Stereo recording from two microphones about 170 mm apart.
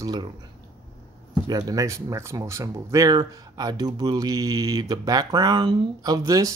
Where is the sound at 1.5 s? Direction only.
20° right (ahead or behind).